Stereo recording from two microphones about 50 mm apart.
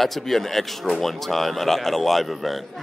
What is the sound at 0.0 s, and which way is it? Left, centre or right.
Speech, centre.